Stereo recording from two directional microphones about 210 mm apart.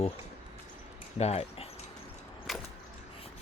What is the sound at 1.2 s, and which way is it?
Speech, 30° left (ahead or behind).